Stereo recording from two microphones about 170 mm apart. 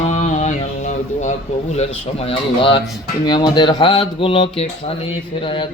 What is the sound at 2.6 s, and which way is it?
Speech, 30° left (ahead or behind).